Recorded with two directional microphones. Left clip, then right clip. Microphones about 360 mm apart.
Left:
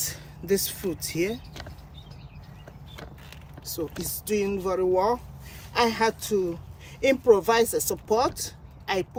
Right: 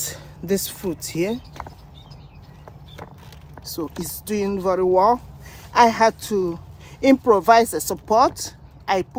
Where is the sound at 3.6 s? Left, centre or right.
Centre.